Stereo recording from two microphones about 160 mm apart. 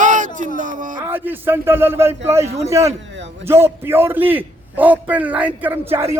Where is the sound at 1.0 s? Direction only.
10° right (ahead or behind).